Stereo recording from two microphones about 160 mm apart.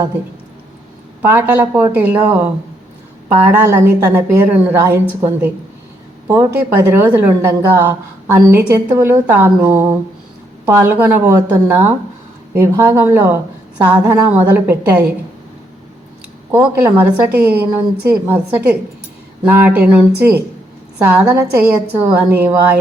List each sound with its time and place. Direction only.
1.2 s a woman's voice: 10° right (ahead or behind)
16.5 s a woman's voice: 15° right (ahead or behind)